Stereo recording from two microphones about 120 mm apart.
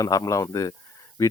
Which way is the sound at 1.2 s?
25° left (ahead or behind).